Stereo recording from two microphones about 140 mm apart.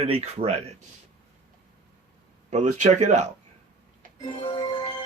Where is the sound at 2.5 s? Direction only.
55° right (ahead or behind).